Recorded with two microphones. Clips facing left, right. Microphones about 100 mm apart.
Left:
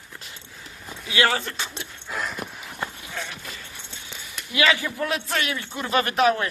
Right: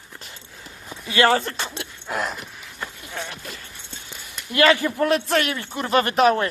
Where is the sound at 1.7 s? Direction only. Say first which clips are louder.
Right 4 dB; 65° right (ahead or behind).